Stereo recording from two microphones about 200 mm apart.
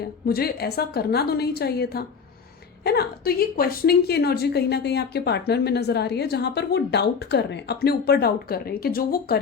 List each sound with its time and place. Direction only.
0.0 s a woman's voice: 50° left (ahead or behind)